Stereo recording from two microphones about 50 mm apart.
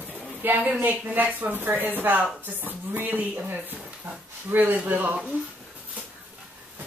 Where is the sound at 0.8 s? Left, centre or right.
Right.